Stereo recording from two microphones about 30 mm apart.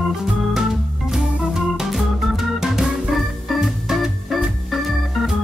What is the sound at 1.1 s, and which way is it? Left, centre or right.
Organ, centre.